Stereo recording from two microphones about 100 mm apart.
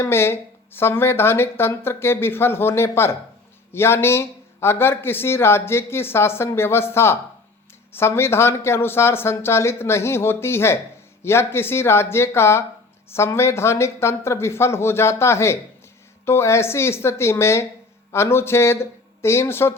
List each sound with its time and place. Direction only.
0.0 s speech: 25° left (ahead or behind)